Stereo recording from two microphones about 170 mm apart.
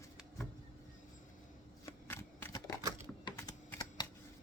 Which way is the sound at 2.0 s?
15° left (ahead or behind).